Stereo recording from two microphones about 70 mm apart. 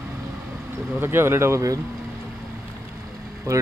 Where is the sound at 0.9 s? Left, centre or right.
Right.